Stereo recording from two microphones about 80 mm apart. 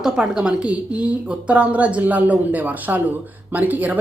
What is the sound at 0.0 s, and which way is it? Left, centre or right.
Speech, centre.